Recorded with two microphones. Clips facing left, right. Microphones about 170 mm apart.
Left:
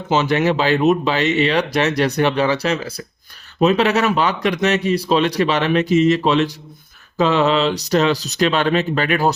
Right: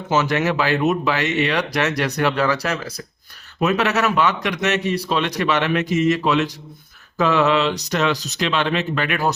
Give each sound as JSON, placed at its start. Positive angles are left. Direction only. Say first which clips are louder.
{"t": 0.1, "sound": "a man's voice", "louder": "left 3 dB", "side_deg": 30}